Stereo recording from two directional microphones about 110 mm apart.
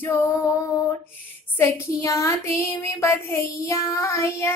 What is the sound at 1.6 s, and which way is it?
A woman's voice, 25° left (ahead or behind).